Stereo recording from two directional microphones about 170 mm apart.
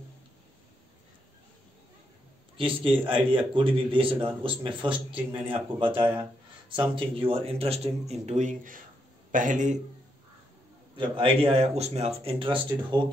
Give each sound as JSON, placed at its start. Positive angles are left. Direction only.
{"t": 2.5, "sound": "a man's voice", "side_deg": -30}
{"t": 11.0, "sound": "a man's voice", "side_deg": -30}